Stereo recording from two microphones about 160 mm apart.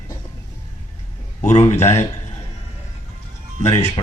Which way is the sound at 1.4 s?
45° left (ahead or behind).